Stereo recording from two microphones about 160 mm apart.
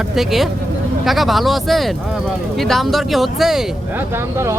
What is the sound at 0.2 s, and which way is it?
Speech, centre (ahead or behind).